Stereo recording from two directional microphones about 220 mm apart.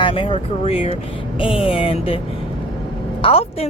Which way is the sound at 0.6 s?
25° left (ahead or behind).